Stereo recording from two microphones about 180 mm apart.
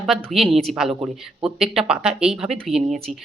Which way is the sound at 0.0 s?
Centre (ahead or behind).